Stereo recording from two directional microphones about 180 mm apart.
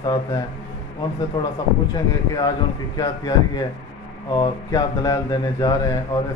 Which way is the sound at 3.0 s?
20° left (ahead or behind).